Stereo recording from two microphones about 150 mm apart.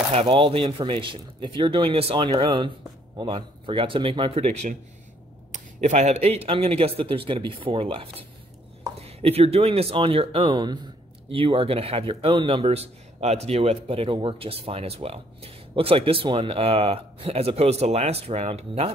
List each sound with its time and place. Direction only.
0.1 s speech: 40° right (ahead or behind)
5.5 s speech: 50° right (ahead or behind)